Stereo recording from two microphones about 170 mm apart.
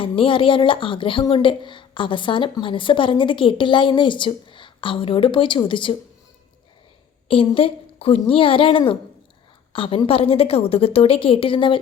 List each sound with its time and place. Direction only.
0.0 s a woman's voice: 30° left (ahead or behind)
7.3 s a woman's voice: 30° left (ahead or behind)